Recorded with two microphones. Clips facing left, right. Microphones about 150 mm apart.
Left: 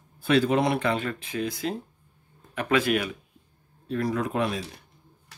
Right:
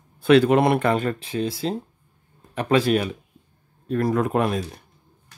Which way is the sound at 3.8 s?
50° right (ahead or behind).